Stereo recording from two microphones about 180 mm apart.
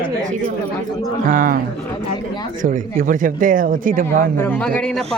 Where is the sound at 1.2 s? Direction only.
50° right (ahead or behind).